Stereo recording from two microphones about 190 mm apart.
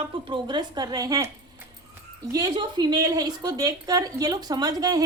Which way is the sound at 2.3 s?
20° right (ahead or behind).